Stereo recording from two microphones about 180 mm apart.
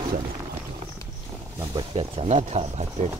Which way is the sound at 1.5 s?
30° right (ahead or behind).